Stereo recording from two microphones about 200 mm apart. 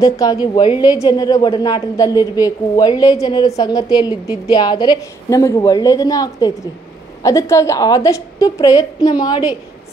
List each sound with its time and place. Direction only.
0.0 s a woman's voice: 20° left (ahead or behind)